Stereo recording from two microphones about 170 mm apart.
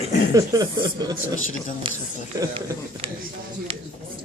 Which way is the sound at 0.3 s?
20° right (ahead or behind).